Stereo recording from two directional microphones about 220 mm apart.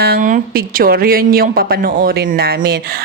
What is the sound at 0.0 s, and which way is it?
Speech, 40° right (ahead or behind).